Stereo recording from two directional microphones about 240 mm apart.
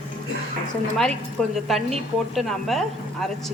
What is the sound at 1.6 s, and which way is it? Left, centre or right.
Speech, centre.